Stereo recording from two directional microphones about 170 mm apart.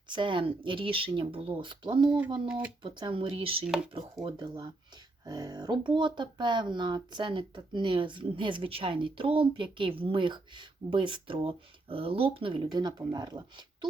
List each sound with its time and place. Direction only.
0.1 s speech: 30° right (ahead or behind)
12.7 s speech: 20° right (ahead or behind)